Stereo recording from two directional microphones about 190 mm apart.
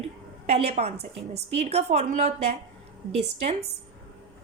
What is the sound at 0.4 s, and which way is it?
A woman's voice, 35° right (ahead or behind).